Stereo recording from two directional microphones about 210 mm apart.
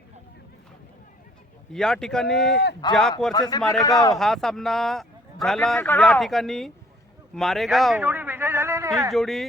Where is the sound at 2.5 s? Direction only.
55° left (ahead or behind).